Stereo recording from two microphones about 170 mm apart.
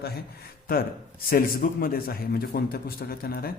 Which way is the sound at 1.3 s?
60° left (ahead or behind).